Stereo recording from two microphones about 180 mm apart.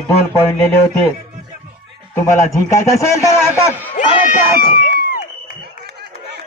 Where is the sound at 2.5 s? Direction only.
15° left (ahead or behind).